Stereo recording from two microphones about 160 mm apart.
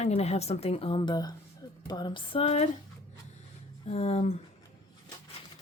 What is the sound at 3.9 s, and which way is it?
Speech, 40° left (ahead or behind).